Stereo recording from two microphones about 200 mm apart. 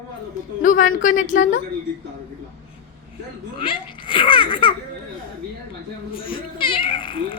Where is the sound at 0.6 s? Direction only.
40° left (ahead or behind).